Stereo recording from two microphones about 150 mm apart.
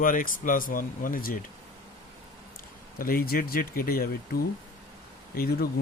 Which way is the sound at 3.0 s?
75° left (ahead or behind).